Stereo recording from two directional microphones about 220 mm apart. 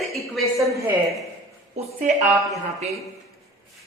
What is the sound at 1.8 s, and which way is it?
Speech, 35° right (ahead or behind).